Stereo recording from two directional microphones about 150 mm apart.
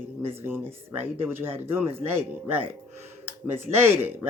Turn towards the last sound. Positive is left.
turn(degrees=-15)  # may be behind; listen again after turning